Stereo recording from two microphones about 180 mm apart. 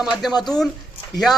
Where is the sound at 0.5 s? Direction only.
20° left (ahead or behind).